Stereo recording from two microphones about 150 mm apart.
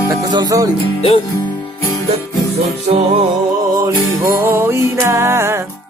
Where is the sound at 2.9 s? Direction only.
50° right (ahead or behind).